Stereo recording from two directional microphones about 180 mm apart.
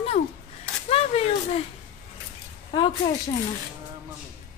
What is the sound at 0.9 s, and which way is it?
Speech, 35° left (ahead or behind).